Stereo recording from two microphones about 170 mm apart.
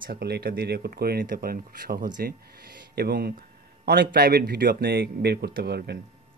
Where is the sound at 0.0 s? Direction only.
70° right (ahead or behind).